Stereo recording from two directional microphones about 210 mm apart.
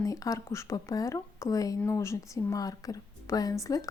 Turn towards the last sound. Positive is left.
turn(degrees=15)  # may be behind; listen again after turning